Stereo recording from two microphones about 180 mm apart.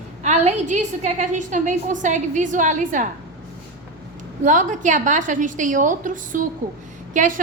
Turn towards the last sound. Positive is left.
turn(degrees=-45)  # may be behind; listen again after turning